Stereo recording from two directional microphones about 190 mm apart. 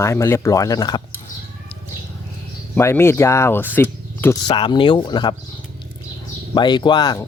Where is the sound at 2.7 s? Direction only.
15° left (ahead or behind).